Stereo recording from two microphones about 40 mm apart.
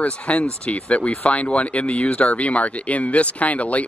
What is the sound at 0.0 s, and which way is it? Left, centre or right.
Speech, left.